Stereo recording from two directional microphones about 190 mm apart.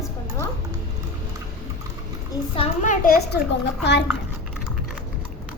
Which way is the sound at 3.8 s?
65° left (ahead or behind).